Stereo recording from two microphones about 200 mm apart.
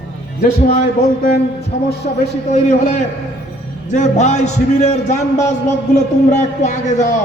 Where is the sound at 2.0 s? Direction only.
40° left (ahead or behind).